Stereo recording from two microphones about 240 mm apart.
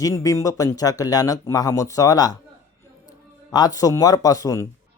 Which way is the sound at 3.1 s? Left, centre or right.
Centre.